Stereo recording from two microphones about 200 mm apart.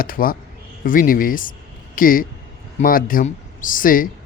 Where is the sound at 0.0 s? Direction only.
45° left (ahead or behind).